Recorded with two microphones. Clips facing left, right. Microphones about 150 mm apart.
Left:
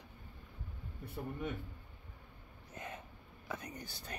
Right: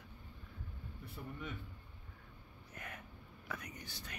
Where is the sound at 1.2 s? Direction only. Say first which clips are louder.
Left 6 dB; 50° left (ahead or behind).